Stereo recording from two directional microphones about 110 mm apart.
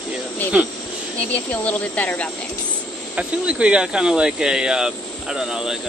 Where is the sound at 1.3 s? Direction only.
15° left (ahead or behind).